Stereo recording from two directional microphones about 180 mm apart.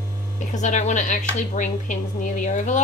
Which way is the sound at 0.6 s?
40° left (ahead or behind).